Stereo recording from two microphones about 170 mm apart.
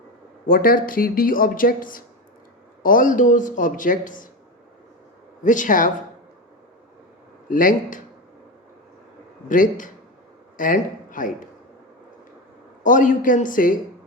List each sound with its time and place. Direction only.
0.4 s speech: 55° left (ahead or behind)
5.4 s speech: 50° left (ahead or behind)
7.5 s speech: 50° left (ahead or behind)
9.5 s a man's voice: 50° left (ahead or behind)
12.8 s speech: 50° left (ahead or behind)